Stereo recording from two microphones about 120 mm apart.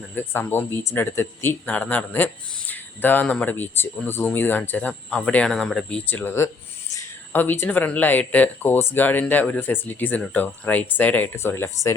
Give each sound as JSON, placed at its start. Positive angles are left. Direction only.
{"t": 0.2, "sound": "speech", "side_deg": 20}
{"t": 6.1, "sound": "speech", "side_deg": 15}